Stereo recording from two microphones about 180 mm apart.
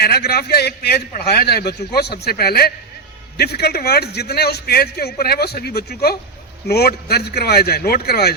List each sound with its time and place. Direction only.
0.0 s a man's voice: 60° left (ahead or behind)